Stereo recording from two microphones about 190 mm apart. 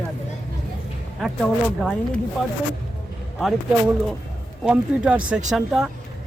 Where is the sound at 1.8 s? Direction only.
Centre (ahead or behind).